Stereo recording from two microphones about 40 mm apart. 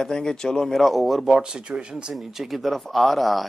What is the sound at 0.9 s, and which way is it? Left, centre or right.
Speech, centre.